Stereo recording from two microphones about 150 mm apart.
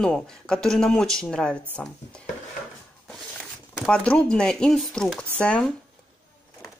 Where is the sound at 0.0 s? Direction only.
5° left (ahead or behind).